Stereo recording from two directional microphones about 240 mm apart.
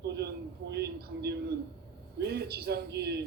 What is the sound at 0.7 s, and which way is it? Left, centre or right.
A man's voice, right.